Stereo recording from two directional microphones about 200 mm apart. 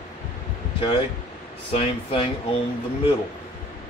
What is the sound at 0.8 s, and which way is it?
Speech, 25° left (ahead or behind).